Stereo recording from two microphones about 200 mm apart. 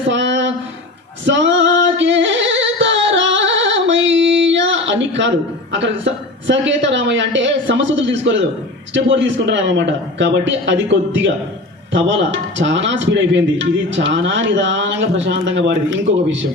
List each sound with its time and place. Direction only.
0.1 s a sound: 65° right (ahead or behind)
1.2 s singing: 65° right (ahead or behind)
5.7 s a woman's voice: 65° right (ahead or behind)